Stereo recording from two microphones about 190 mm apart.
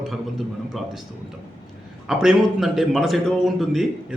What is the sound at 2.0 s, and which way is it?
A man's voice, 5° right (ahead or behind).